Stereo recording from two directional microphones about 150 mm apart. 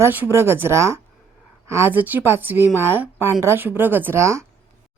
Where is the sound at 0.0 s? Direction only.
15° right (ahead or behind).